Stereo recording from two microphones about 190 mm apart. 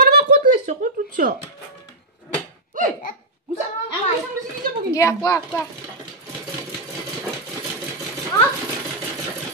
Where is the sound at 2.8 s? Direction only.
45° right (ahead or behind).